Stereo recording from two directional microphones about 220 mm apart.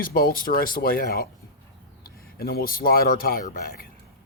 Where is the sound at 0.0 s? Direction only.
40° left (ahead or behind).